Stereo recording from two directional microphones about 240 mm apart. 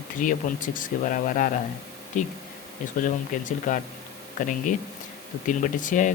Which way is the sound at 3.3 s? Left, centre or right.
Left.